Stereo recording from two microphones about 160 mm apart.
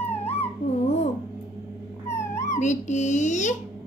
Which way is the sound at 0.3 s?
40° left (ahead or behind).